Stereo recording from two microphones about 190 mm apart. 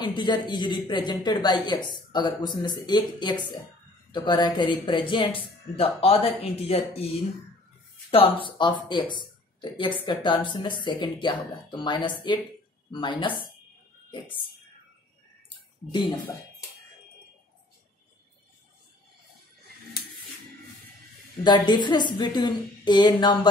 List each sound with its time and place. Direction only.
0.0 s speech: 25° left (ahead or behind)
8.5 s speech: 25° left (ahead or behind)
15.5 s a sound: 20° left (ahead or behind)
21.5 s speech: 25° left (ahead or behind)